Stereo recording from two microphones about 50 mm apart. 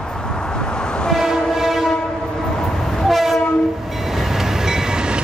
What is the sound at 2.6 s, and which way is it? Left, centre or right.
Train, centre.